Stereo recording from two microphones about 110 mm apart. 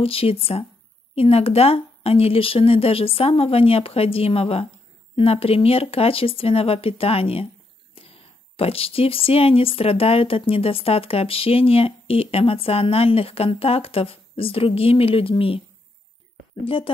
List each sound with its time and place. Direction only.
0.0 s speech: 60° left (ahead or behind)
16.6 s speech: 55° left (ahead or behind)